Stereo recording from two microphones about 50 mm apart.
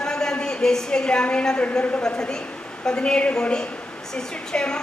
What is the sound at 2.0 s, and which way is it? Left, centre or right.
A woman's voice, centre.